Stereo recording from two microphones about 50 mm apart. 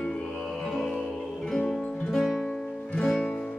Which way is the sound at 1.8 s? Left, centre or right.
Left.